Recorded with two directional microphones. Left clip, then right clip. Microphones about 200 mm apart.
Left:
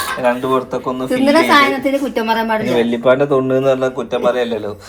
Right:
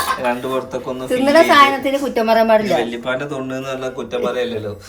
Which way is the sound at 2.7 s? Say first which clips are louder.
Left 6 dB; 20° left (ahead or behind).